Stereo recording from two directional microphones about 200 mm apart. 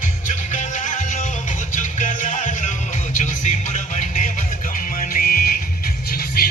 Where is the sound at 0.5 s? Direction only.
40° left (ahead or behind).